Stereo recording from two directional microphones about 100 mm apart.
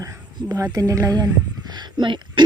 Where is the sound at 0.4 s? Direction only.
35° right (ahead or behind).